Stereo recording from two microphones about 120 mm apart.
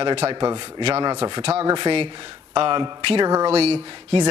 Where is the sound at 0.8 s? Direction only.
60° right (ahead or behind).